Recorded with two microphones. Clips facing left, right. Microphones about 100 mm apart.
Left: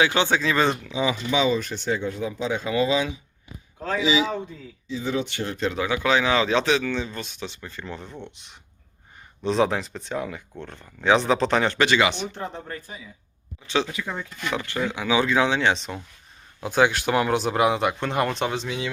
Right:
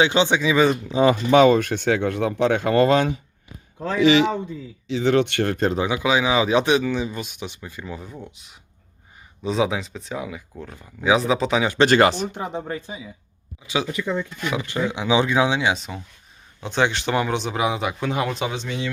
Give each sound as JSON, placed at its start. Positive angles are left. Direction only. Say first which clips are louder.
{"t": 0.0, "sound": "speech", "louder": "right 3 dB", "side_deg": -20}
{"t": 1.0, "sound": "speech", "louder": "right 8 dB", "side_deg": -55}
{"t": 4.9, "sound": "speech", "louder": "right 8 dB", "side_deg": -80}
{"t": 5.7, "sound": "speech", "louder": "right 1 dB", "side_deg": -15}
{"t": 11.9, "sound": "speech", "louder": "right 5 dB", "side_deg": -40}
{"t": 12.3, "sound": "speech", "louder": "right 5 dB", "side_deg": -15}
{"t": 14.5, "sound": "speech", "louder": "right 2 dB", "side_deg": -15}